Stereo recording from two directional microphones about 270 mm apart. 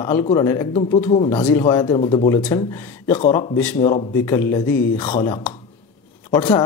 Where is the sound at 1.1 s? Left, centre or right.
Left.